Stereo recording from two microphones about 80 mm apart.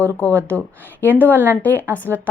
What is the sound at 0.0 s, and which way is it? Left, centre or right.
A woman's voice, left.